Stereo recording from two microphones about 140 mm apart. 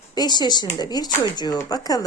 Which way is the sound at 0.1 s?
30° left (ahead or behind).